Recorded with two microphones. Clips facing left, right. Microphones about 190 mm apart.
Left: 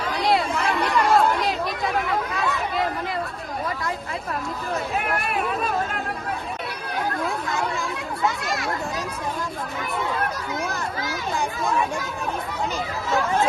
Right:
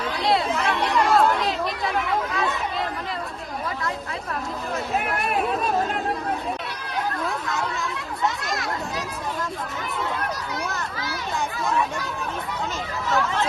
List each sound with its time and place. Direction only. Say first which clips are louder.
0.3 s chatter: even; centre (ahead or behind)
13.1 s speech: left 3 dB; 50° left (ahead or behind)